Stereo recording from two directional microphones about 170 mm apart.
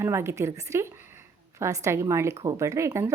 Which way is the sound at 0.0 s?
15° right (ahead or behind).